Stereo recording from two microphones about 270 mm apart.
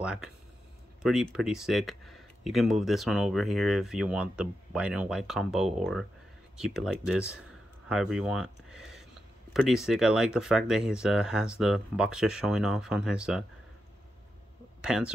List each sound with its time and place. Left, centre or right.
0.0 s speech: centre
14.8 s speech: centre